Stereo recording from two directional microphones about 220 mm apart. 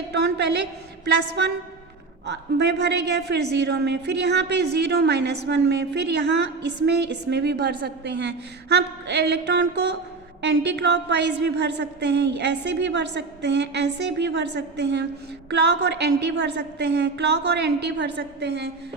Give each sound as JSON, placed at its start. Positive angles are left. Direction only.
{"t": 0.1, "sound": "a woman's voice", "side_deg": -50}